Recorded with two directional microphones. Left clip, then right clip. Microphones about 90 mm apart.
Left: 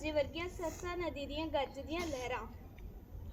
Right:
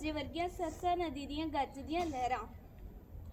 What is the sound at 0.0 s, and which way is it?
A woman's voice, 65° right (ahead or behind).